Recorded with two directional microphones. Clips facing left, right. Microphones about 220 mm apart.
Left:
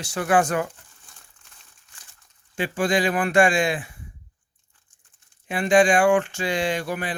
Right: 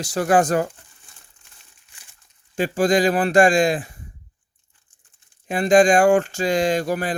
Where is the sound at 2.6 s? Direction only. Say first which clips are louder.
Right 4 dB; 40° right (ahead or behind).